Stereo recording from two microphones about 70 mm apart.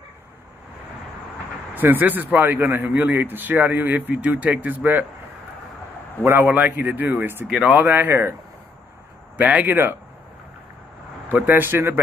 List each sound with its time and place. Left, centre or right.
1.8 s a man's voice: right
6.2 s a man's voice: right
7.4 s a man's voice: centre; by 8.4 s right
9.4 s a man's voice: right
11.3 s a man's voice: right